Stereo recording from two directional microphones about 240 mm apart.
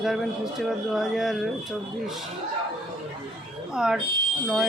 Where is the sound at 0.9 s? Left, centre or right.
Centre.